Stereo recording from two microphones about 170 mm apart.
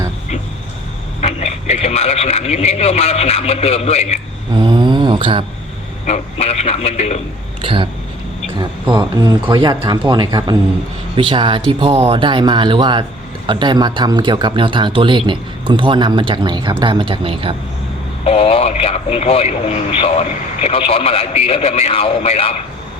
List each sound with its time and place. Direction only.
1.2 s speech: 40° left (ahead or behind)
4.5 s a sound: 25° right (ahead or behind)
6.1 s a man's voice: 40° left (ahead or behind)
7.6 s speech: 30° right (ahead or behind)
18.3 s a man's voice: 35° left (ahead or behind)